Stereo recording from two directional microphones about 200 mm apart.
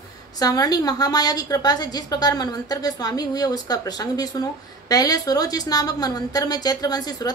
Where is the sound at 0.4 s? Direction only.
20° left (ahead or behind).